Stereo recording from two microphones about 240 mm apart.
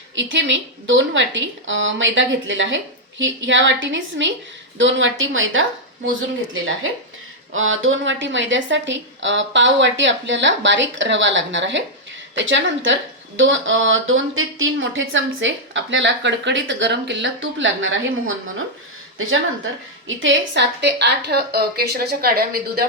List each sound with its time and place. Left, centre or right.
0.2 s speech: right
7.5 s speech: right
20.1 s a woman's voice: right